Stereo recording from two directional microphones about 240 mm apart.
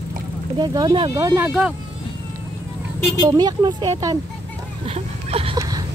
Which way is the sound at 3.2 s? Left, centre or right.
Centre.